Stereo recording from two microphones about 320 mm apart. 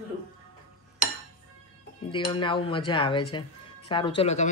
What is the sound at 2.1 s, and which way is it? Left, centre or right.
Speech, centre.